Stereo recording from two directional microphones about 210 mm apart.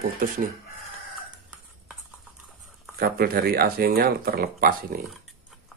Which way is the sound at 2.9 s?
45° right (ahead or behind).